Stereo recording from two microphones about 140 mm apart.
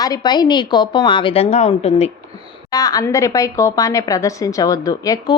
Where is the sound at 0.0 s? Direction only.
30° left (ahead or behind); by 2.0 s 50° left (ahead or behind).